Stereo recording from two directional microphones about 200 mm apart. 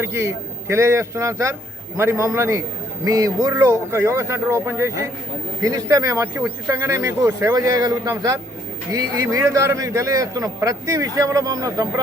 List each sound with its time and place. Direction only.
0.0 s a man's voice: 15° right (ahead or behind)